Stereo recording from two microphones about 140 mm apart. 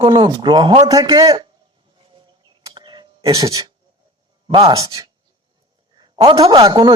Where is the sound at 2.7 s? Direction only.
35° right (ahead or behind).